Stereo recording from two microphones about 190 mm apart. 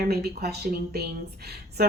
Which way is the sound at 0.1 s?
55° right (ahead or behind).